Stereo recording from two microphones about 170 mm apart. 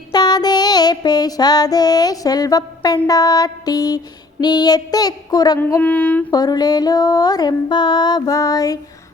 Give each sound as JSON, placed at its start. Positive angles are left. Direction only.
{"t": 0.1, "sound": "music", "side_deg": 25}
{"t": 3.1, "sound": "female singing", "side_deg": 20}
{"t": 5.5, "sound": "child singing", "side_deg": 10}
{"t": 6.3, "sound": "female singing", "side_deg": 25}